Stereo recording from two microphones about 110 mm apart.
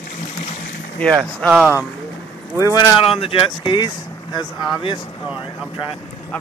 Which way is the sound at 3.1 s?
55° left (ahead or behind).